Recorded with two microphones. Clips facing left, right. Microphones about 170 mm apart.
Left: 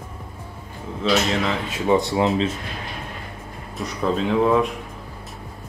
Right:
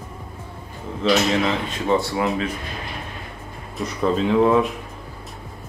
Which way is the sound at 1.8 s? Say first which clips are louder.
Left 2 dB; 20° left (ahead or behind).